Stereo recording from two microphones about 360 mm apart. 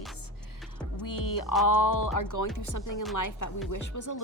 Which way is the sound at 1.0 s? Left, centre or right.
Left.